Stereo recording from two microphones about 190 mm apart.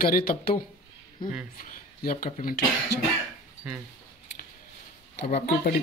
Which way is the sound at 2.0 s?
50° left (ahead or behind).